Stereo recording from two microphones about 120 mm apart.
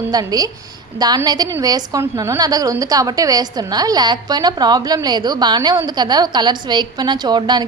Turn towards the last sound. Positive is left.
turn(degrees=-35)  # may be behind; listen again after turning